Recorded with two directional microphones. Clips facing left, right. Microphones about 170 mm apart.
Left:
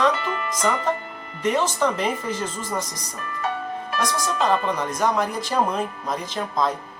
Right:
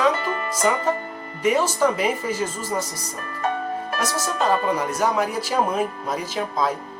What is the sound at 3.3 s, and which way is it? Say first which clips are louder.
Music: right 3 dB; 45° right (ahead or behind).